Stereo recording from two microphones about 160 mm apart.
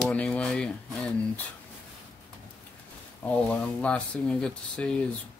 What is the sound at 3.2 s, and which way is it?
Speech, 10° left (ahead or behind).